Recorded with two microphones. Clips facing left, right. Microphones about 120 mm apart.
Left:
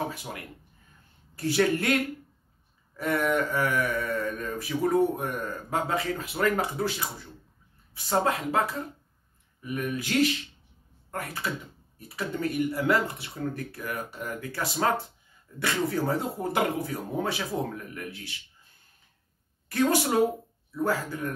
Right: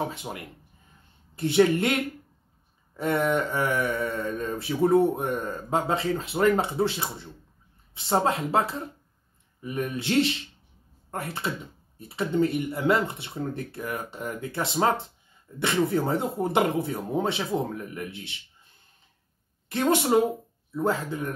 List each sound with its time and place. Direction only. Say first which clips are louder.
0.1 s speech: right 2 dB; 25° right (ahead or behind)
3.0 s speech: right 2 dB; 25° right (ahead or behind)
19.7 s speech: right 2 dB; 25° right (ahead or behind)